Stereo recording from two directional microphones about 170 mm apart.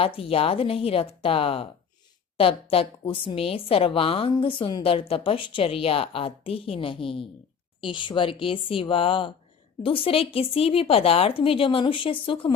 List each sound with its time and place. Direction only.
0.0 s a woman's voice: 35° left (ahead or behind)